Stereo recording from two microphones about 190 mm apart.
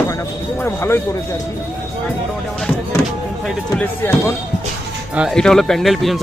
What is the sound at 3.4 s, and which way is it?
Speech, 5° left (ahead or behind).